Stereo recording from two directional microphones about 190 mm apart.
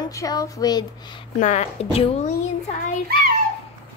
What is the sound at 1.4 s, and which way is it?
Speech, 40° left (ahead or behind).